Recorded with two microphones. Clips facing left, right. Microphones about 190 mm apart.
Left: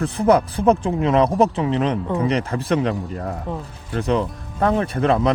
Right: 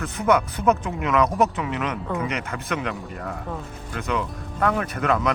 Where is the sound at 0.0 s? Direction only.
30° left (ahead or behind).